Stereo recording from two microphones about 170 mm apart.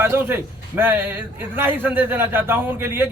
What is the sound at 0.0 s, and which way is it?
A man's voice, 15° right (ahead or behind).